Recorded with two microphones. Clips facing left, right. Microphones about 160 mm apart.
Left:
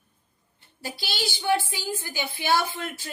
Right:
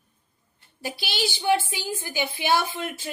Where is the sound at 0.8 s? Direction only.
15° right (ahead or behind).